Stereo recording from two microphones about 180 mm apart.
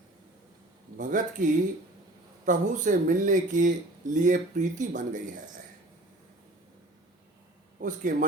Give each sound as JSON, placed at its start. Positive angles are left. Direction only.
{"t": 0.9, "sound": "speech", "side_deg": -45}
{"t": 7.8, "sound": "speech", "side_deg": -45}